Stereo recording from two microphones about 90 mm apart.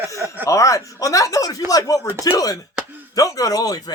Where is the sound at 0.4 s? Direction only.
35° left (ahead or behind).